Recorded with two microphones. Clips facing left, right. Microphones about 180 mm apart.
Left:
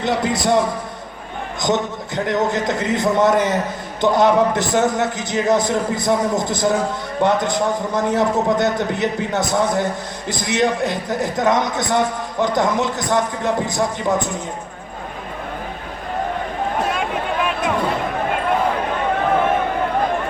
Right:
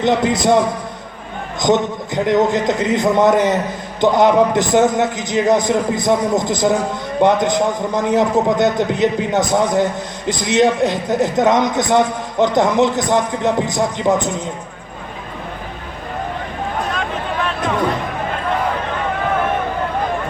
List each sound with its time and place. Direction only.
0.0 s a man's voice: 20° right (ahead or behind)
1.6 s a man's voice: 20° right (ahead or behind)
16.9 s a sound: 10° left (ahead or behind)